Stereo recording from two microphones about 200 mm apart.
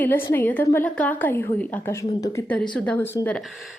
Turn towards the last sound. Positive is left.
turn(degrees=10)  # may be behind; listen again after turning